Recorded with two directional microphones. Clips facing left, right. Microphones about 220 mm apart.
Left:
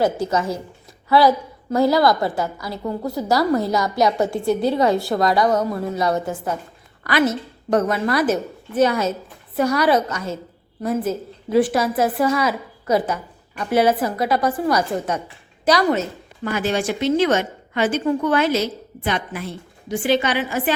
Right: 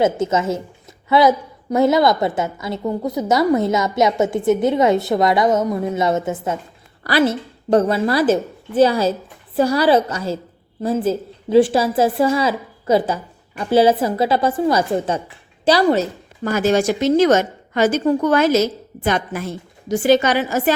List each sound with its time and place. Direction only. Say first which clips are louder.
0.0 s a woman's voice: right 3 dB; 20° right (ahead or behind); by 20.7 s 40° right (ahead or behind)